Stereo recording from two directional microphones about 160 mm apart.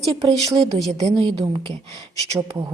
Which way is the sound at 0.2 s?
25° right (ahead or behind).